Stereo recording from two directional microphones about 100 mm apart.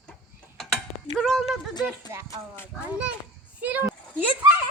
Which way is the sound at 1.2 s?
Centre (ahead or behind).